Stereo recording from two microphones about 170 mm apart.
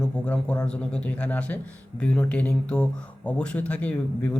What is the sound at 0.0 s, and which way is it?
A man's voice, 5° left (ahead or behind).